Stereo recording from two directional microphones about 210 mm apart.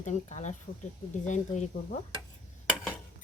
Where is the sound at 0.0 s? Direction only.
35° left (ahead or behind).